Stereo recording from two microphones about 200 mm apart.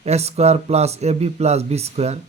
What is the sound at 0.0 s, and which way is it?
Speech, 30° right (ahead or behind).